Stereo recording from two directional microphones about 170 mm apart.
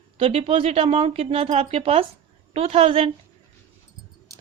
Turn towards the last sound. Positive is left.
turn(degrees=-35)  # may be behind; listen again after turning